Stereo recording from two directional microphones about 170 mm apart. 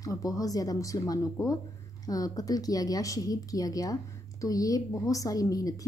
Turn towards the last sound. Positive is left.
turn(degrees=20)  # may be behind; listen again after turning